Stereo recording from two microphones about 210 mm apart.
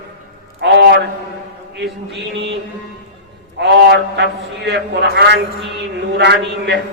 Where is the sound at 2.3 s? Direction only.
55° right (ahead or behind).